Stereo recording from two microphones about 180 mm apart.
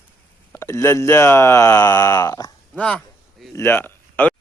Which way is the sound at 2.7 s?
5° left (ahead or behind).